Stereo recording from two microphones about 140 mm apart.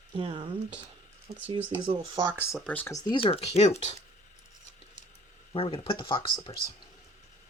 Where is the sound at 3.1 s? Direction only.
45° left (ahead or behind).